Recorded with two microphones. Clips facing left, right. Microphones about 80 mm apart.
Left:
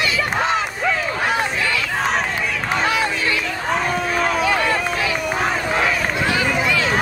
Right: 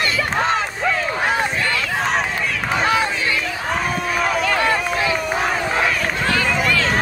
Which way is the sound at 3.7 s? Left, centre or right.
Centre.